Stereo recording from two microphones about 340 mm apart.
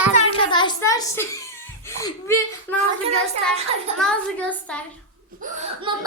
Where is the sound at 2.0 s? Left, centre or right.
Centre.